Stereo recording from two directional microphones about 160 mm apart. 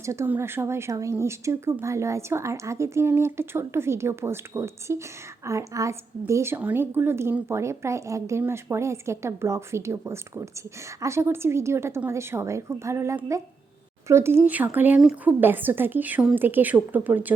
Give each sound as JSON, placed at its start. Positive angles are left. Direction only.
{"t": 0.0, "sound": "a woman's voice", "side_deg": -15}